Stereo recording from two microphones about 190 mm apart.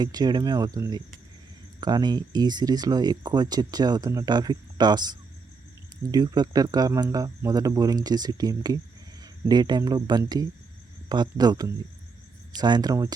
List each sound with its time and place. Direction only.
0.0 s speech: 20° right (ahead or behind)